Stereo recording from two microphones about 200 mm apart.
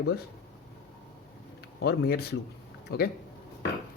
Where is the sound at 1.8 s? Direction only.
55° left (ahead or behind).